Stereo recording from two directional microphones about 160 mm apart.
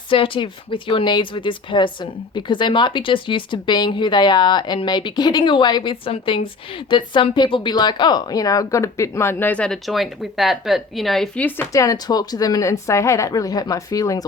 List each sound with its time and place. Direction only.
0.1 s speech: 30° left (ahead or behind)